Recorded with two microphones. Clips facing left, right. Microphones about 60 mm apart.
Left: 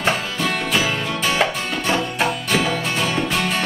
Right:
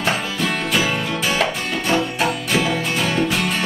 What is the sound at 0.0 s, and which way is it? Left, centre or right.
Music, centre.